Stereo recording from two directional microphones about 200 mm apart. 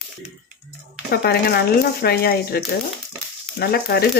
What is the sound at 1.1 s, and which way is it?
Speech, 50° left (ahead or behind).